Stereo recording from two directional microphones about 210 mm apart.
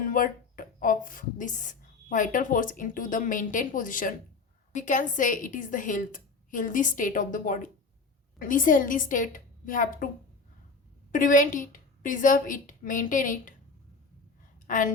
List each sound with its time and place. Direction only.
0.0 s a woman's voice: 40° left (ahead or behind)
11.1 s a woman's voice: 40° left (ahead or behind)
14.7 s a woman's voice: 40° left (ahead or behind)